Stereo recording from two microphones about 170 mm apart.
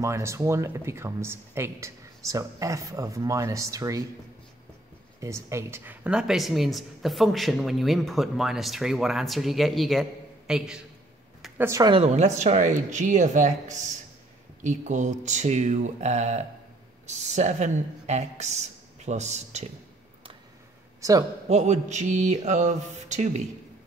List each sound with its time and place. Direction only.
0.0 s speech: 15° right (ahead or behind)
5.2 s speech: 15° right (ahead or behind)
11.9 s a woman's voice: 40° right (ahead or behind)
12.4 s a sound: 45° right (ahead or behind)
17.0 s speech: 45° right (ahead or behind)
21.0 s speech: 20° right (ahead or behind)
21.5 s a sound: 40° right (ahead or behind)